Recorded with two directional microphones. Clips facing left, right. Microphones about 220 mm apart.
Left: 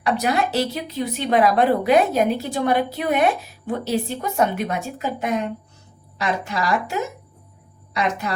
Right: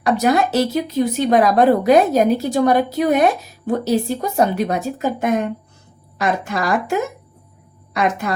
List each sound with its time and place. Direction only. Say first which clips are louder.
0.0 s speech: right 5 dB; 45° right (ahead or behind)
7.9 s speech: right 4 dB; 50° right (ahead or behind)